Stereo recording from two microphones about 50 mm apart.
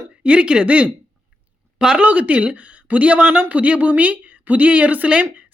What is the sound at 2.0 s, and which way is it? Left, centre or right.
A woman's voice, right.